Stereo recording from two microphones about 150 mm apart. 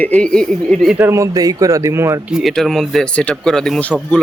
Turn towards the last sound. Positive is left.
turn(degrees=10)  # may be behind; listen again after turning